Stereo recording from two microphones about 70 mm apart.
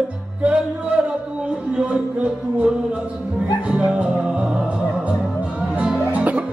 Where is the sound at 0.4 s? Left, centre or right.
Centre.